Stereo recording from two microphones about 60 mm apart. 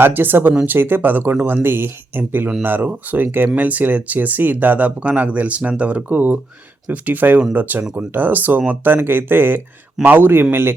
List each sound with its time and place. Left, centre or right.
0.0 s speech: right